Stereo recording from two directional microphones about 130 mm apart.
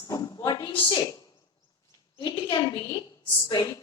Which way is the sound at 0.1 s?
30° left (ahead or behind).